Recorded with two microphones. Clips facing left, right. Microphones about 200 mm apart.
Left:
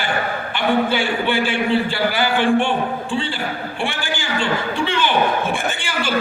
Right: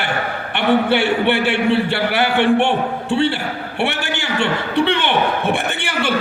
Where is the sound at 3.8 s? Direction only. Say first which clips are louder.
Right 5 dB; 65° right (ahead or behind).